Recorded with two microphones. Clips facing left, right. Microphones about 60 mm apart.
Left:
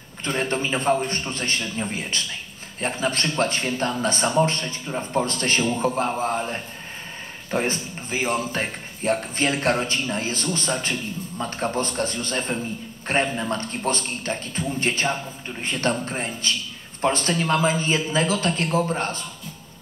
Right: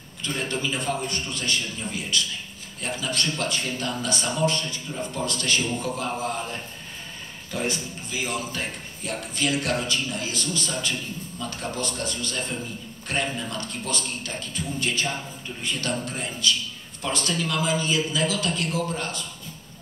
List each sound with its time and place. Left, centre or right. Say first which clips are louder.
0.2 s speech: left 4 dB; left